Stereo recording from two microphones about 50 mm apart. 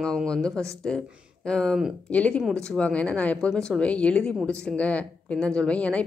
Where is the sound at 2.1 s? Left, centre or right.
Left.